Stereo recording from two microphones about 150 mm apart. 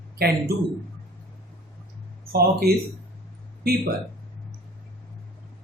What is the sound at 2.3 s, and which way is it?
Speech, 90° right.